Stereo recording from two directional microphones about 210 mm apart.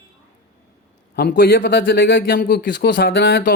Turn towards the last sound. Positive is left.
turn(degrees=45)  # may be behind; listen again after turning